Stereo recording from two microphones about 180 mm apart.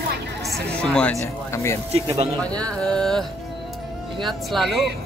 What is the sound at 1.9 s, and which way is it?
Speech, 35° right (ahead or behind).